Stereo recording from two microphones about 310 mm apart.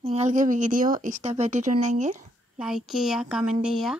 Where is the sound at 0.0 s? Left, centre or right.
Right.